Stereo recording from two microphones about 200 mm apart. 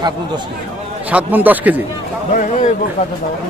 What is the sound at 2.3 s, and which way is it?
Speech, 35° left (ahead or behind).